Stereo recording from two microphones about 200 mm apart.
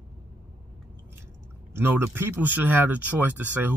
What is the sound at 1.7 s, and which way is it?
Speech, 10° right (ahead or behind).